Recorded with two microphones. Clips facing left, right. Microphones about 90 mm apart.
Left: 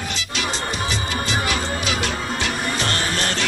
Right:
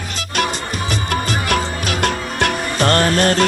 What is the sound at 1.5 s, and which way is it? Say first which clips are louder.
Music: right 4 dB; 55° right (ahead or behind).